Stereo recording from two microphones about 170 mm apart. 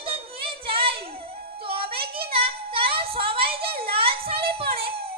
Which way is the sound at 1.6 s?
35° right (ahead or behind).